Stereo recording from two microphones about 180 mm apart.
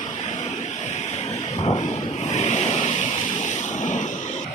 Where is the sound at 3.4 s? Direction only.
45° left (ahead or behind).